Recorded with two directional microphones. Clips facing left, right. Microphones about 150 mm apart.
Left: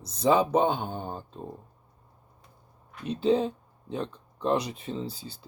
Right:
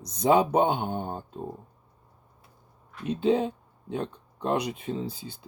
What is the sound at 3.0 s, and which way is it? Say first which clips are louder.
Speech: even; 5° right (ahead or behind).